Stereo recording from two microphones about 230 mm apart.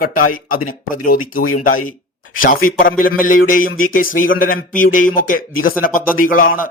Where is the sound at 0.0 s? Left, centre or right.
Left.